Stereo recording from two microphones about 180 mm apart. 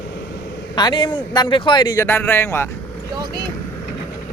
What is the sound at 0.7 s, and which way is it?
A man's voice, 25° left (ahead or behind).